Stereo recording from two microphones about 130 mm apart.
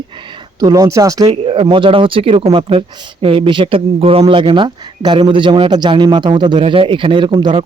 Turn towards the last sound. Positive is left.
turn(degrees=-40)  # may be behind; listen again after turning